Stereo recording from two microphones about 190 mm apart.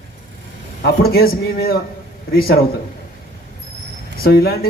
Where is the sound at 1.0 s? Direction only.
55° left (ahead or behind).